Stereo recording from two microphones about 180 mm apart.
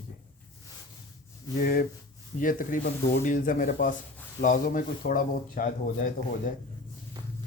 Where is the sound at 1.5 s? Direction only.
50° left (ahead or behind).